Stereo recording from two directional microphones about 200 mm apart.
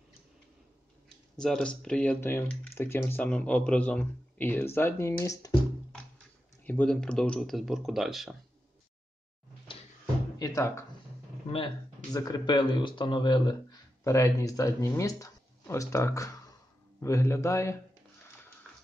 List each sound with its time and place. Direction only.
1.4 s speech: 5° left (ahead or behind)
6.6 s speech: 5° left (ahead or behind)
10.4 s speech: 15° left (ahead or behind)
11.5 s speech: 25° left (ahead or behind)